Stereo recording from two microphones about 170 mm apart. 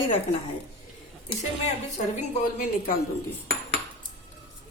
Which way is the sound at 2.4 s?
55° left (ahead or behind).